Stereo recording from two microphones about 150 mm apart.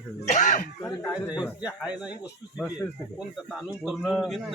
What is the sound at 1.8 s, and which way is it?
Speech, 5° right (ahead or behind).